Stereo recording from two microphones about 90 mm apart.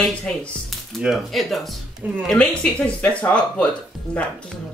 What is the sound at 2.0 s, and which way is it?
Speech, 20° right (ahead or behind).